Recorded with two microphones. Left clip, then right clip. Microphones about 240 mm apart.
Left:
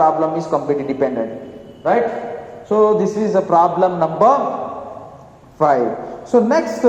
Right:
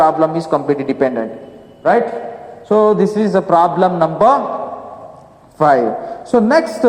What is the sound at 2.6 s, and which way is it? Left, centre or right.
A man's voice, right.